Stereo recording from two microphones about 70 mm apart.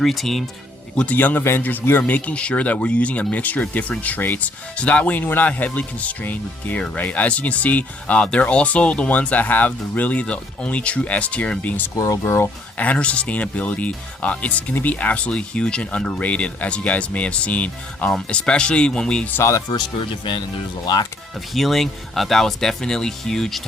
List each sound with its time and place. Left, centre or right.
0.0 s speech: centre
1.1 s speech: left
11.9 s speech: left
12.2 s speech: left
12.7 s speech: left
19.4 s speech: left
19.6 s speech: left
20.8 s speech: left
21.5 s speech: centre